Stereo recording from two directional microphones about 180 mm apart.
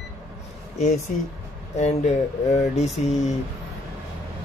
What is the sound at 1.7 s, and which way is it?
Speech, 40° left (ahead or behind).